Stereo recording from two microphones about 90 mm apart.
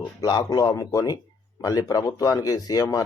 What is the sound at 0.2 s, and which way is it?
Speech, 50° left (ahead or behind).